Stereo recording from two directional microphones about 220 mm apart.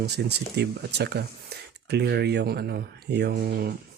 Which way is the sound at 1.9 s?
50° right (ahead or behind).